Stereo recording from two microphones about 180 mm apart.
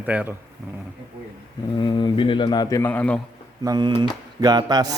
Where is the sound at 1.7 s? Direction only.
25° left (ahead or behind); by 3.2 s 10° left (ahead or behind).